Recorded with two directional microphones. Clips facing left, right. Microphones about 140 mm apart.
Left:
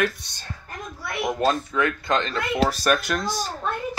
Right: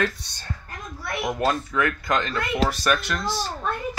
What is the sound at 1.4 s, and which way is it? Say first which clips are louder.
Speech: left 1 dB; 25° left (ahead or behind).